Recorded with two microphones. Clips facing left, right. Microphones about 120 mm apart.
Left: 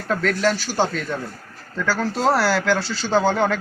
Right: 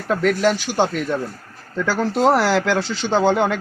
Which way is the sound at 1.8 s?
20° right (ahead or behind).